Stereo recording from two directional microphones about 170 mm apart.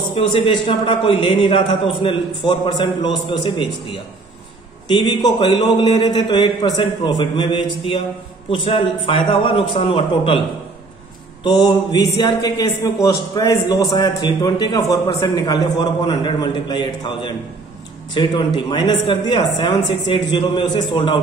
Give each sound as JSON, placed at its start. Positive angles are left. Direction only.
{"t": 0.1, "sound": "a man's voice", "side_deg": 30}
{"t": 4.8, "sound": "a man's voice", "side_deg": 25}
{"t": 11.4, "sound": "a man's voice", "side_deg": 25}